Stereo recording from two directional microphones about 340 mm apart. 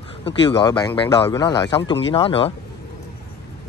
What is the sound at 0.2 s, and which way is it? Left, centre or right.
A man's voice, centre.